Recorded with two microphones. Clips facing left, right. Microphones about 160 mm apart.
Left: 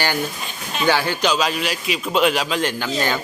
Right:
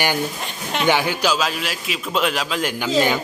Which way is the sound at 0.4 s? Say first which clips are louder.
Right 2 dB; 70° right (ahead or behind).